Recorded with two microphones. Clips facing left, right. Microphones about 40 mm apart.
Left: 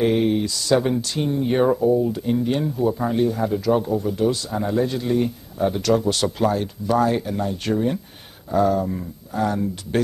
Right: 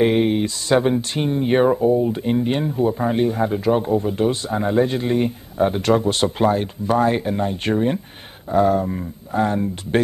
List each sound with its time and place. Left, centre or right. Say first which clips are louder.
0.0 s speech: right 2 dB; right